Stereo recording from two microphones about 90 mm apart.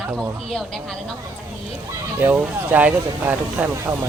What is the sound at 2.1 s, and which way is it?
Speech, 20° right (ahead or behind).